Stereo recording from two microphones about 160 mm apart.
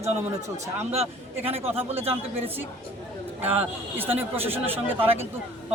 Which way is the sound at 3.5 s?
10° right (ahead or behind).